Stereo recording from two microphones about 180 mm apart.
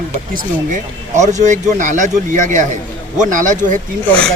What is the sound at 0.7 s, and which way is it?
Speech, 40° right (ahead or behind).